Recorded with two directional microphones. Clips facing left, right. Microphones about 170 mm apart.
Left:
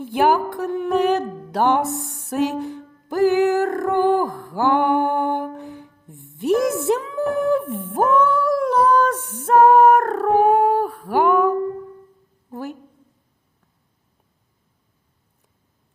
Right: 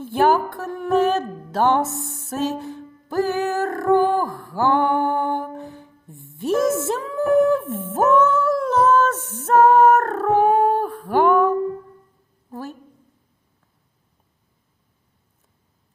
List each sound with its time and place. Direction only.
0.0 s speech: 15° left (ahead or behind)
4.0 s music: 15° left (ahead or behind)
12.5 s a sound: 15° left (ahead or behind)